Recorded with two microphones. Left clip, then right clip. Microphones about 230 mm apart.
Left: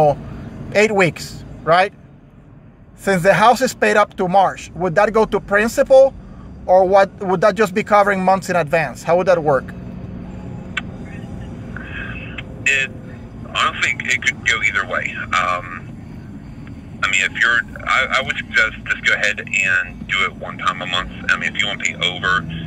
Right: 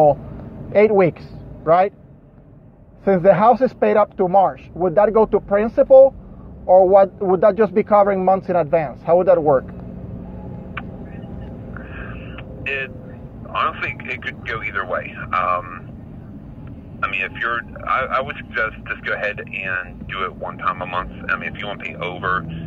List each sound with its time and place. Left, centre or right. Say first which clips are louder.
0.7 s speech: right 1 dB; left
3.1 s speech: even; left
11.9 s vehicle: left 9 dB; left
13.5 s speech: left 4 dB; left
17.0 s speech: left 6 dB; left